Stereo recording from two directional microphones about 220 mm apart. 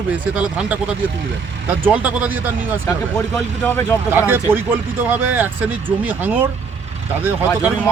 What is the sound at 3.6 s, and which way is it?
Speech, 10° left (ahead or behind).